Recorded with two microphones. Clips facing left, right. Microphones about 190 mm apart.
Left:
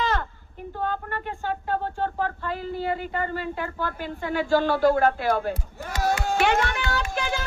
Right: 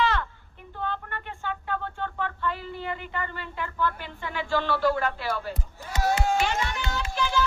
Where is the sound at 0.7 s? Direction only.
45° left (ahead or behind).